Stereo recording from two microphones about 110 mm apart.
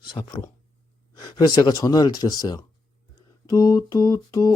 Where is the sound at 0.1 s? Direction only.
45° left (ahead or behind).